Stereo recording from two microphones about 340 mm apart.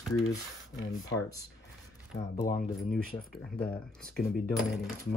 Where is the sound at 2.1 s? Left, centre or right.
Left.